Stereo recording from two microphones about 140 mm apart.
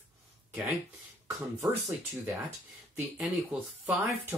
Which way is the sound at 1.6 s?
Centre (ahead or behind).